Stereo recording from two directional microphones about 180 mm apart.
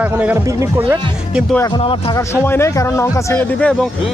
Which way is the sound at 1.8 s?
30° left (ahead or behind).